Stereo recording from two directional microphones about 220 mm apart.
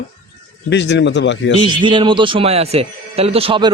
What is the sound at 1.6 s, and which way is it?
Speech, 20° right (ahead or behind).